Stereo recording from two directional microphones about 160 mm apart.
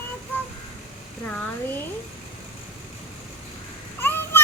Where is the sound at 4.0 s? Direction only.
15° left (ahead or behind).